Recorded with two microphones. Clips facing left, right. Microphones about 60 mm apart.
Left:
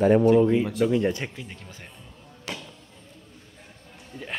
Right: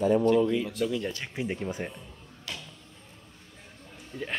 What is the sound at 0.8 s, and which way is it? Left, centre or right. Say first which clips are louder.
Speech: left 7 dB; left.